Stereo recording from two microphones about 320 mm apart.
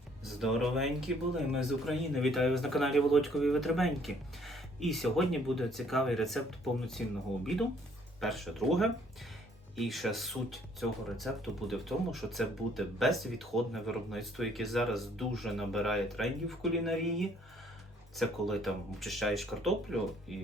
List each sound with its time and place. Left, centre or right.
0.3 s speech: centre
8.2 s speech: centre